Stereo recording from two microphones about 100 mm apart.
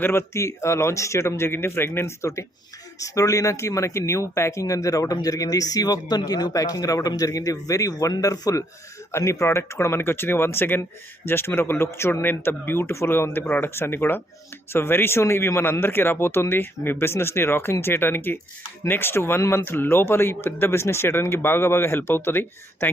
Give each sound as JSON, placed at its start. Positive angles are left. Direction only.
{"t": 0.0, "sound": "speech", "side_deg": 25}